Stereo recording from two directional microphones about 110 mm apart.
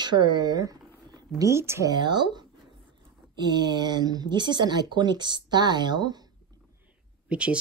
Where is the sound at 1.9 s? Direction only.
40° right (ahead or behind).